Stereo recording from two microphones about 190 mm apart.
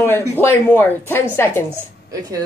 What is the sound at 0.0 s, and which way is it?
A woman's voice, 10° left (ahead or behind).